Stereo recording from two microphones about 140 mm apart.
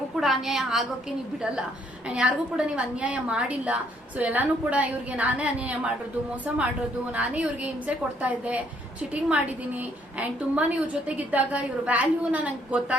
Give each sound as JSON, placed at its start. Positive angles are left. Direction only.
{"t": 0.2, "sound": "a woman's voice", "side_deg": 0}
{"t": 2.0, "sound": "a woman's voice", "side_deg": -5}
{"t": 7.1, "sound": "a woman's voice", "side_deg": -10}